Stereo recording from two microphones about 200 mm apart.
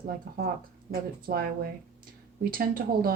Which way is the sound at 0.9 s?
50° right (ahead or behind).